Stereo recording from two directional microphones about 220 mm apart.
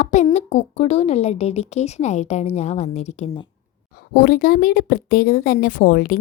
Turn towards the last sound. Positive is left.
turn(degrees=40)  # may be behind; listen again after turning